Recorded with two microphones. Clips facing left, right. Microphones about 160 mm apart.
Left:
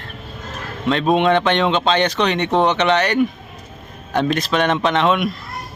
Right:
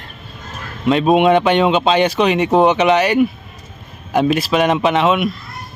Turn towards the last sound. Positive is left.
turn(degrees=-5)  # may be behind; listen again after turning